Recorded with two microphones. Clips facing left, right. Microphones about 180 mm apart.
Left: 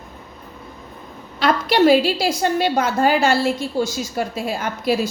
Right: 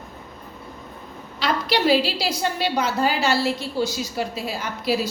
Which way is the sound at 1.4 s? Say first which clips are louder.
Left 6 dB; 50° left (ahead or behind).